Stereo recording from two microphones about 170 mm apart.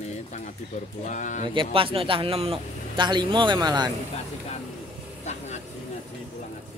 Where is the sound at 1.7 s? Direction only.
30° right (ahead or behind).